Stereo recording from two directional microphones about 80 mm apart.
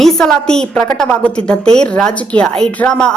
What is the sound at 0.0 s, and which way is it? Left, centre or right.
A woman's voice, centre.